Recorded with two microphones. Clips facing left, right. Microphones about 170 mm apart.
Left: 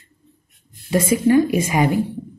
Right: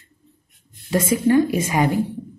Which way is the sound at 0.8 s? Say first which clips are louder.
Left 2 dB; 15° left (ahead or behind).